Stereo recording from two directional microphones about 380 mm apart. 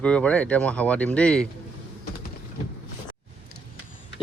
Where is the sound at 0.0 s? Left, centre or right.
Centre.